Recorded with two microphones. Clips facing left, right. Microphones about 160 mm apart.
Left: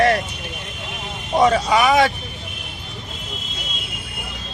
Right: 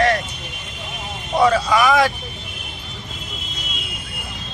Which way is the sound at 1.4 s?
20° left (ahead or behind).